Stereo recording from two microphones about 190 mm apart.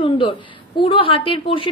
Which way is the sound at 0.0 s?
30° left (ahead or behind).